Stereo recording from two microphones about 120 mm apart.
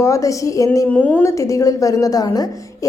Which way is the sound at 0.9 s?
15° left (ahead or behind).